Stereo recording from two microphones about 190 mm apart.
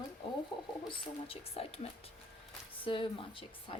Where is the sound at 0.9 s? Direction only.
30° left (ahead or behind).